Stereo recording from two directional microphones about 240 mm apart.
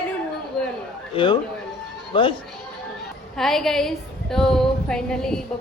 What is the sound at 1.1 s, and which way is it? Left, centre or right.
A man's voice, centre.